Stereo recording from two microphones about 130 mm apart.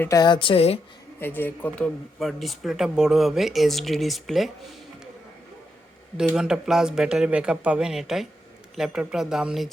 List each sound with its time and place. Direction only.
0.1 s speech: 35° left (ahead or behind)
1.2 s speech: 15° left (ahead or behind)
2.1 s speech: centre (ahead or behind)
6.1 s speech: 5° right (ahead or behind)